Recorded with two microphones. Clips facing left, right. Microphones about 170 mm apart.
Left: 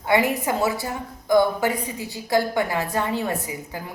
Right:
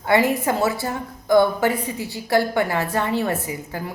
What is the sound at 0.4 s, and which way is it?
Speech, 15° left (ahead or behind).